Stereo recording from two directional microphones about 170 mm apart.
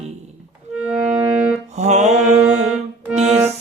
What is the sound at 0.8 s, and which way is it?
Music, 5° right (ahead or behind).